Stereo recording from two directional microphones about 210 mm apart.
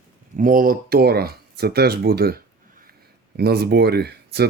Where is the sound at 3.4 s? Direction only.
50° right (ahead or behind).